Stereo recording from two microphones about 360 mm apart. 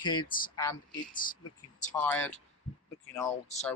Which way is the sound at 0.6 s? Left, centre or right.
Centre.